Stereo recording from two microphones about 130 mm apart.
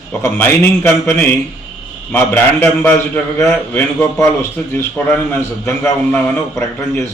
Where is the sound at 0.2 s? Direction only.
15° left (ahead or behind).